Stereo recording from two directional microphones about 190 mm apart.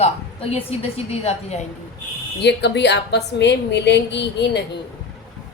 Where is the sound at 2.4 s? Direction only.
65° left (ahead or behind).